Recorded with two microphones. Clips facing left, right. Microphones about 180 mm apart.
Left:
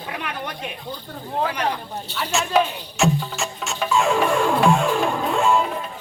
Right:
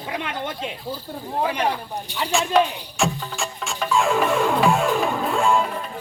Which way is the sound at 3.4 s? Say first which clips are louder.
Left 1 dB; centre (ahead or behind).